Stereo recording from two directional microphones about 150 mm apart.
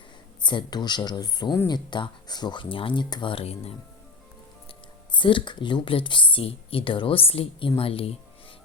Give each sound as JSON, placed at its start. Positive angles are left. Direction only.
{"t": 0.4, "sound": "speech", "side_deg": 30}
{"t": 5.1, "sound": "speech", "side_deg": 30}